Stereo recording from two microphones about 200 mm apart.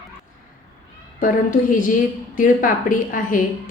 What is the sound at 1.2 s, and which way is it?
A woman's voice, 45° left (ahead or behind).